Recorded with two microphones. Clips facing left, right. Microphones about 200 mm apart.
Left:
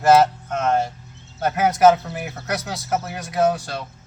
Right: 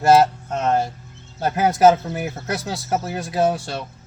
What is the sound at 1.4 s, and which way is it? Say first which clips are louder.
Speech: right 1 dB; 30° right (ahead or behind).